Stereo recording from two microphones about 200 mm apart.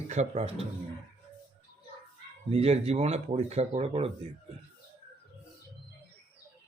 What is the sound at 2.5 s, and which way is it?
Speech, 30° right (ahead or behind).